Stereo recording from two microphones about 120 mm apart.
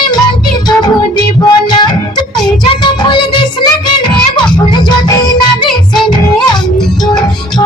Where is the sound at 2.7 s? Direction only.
40° left (ahead or behind).